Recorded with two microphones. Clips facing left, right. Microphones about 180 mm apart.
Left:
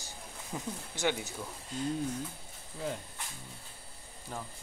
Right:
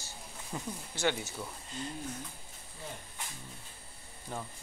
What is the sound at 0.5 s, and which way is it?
Speech, 10° left (ahead or behind).